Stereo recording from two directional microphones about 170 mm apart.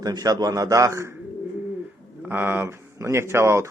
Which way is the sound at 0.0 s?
20° right (ahead or behind).